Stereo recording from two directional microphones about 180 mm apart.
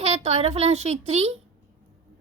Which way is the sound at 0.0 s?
35° right (ahead or behind).